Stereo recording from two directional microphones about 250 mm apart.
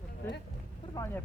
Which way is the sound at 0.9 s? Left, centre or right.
Centre.